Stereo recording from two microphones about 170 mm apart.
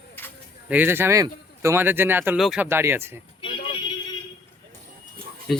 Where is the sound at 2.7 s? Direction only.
15° right (ahead or behind).